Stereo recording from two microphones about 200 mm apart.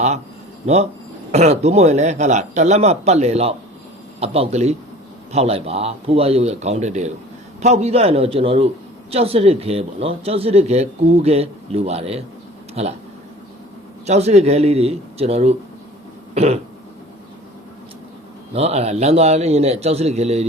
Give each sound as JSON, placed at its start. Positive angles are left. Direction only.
{"t": 0.6, "sound": "a man's voice", "side_deg": -30}
{"t": 14.1, "sound": "a man's voice", "side_deg": -30}
{"t": 16.3, "sound": "cough", "side_deg": -30}
{"t": 18.5, "sound": "a man's voice", "side_deg": -30}